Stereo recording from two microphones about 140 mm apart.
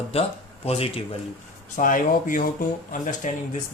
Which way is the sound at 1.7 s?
70° left (ahead or behind).